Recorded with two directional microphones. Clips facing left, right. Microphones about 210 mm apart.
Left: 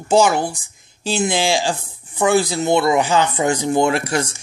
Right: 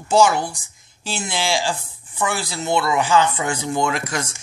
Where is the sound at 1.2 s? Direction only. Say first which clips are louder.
Left 5 dB; 20° left (ahead or behind).